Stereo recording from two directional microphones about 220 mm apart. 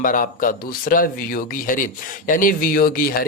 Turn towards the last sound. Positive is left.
turn(degrees=40)  # may be behind; listen again after turning